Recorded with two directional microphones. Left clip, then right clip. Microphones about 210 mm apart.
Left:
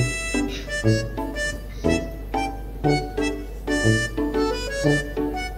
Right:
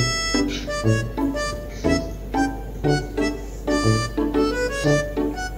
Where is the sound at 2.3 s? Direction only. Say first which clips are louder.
Right 3 dB; 10° left (ahead or behind).